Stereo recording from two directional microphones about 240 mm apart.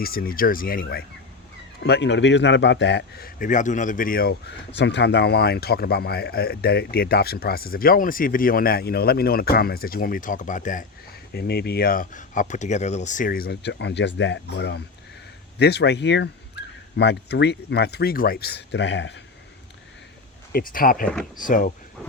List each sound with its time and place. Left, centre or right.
0.0 s speech: left
20.5 s speech: left